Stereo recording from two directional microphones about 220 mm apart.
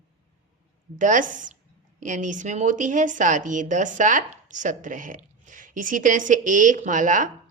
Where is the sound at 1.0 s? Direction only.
35° right (ahead or behind).